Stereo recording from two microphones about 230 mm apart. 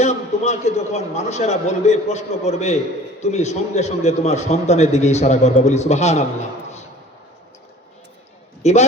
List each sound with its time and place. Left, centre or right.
0.0 s a man's voice: left
8.6 s a man's voice: left